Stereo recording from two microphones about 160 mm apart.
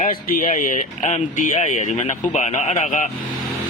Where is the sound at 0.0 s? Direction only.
60° left (ahead or behind).